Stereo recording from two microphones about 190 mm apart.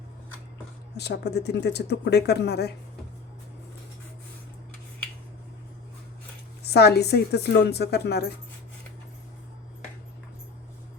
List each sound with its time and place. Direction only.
0.9 s speech: 60° left (ahead or behind)
6.6 s speech: 60° left (ahead or behind)